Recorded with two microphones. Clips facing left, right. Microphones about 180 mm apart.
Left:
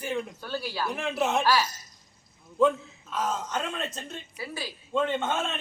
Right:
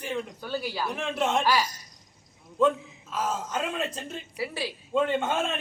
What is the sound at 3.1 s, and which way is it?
A man's voice, 5° right (ahead or behind).